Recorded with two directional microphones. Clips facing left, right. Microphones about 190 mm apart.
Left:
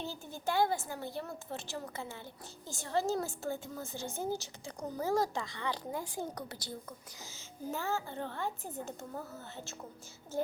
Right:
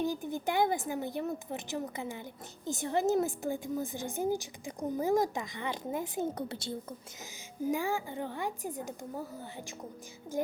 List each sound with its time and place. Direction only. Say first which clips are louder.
0.0 s a woman's voice: right 6 dB; 15° right (ahead or behind)
7.7 s a woman's voice: right 4 dB; 15° right (ahead or behind)